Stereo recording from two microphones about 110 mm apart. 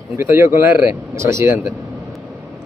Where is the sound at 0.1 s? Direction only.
25° right (ahead or behind).